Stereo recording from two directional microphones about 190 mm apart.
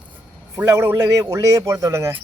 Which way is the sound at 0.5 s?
10° right (ahead or behind).